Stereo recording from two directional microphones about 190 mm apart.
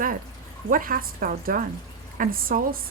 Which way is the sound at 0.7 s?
45° right (ahead or behind).